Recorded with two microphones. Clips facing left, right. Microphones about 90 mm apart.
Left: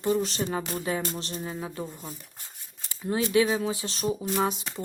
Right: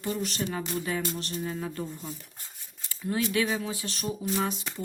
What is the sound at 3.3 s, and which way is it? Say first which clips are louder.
Speech: left 5 dB; 25° left (ahead or behind).